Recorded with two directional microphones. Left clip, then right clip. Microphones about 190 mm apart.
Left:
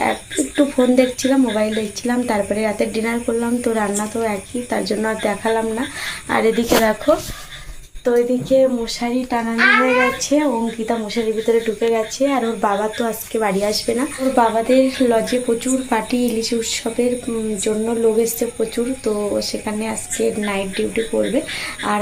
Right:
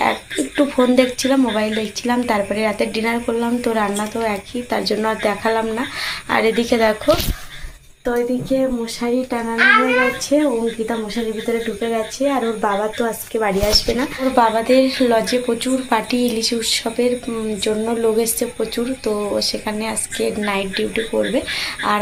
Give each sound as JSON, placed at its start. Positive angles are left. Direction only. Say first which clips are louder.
{"t": 0.0, "sound": "a woman's voice", "louder": "right 1 dB", "side_deg": 0}
{"t": 8.0, "sound": "speech", "louder": "left 3 dB", "side_deg": 25}
{"t": 11.8, "sound": "speech", "louder": "left 2 dB", "side_deg": 10}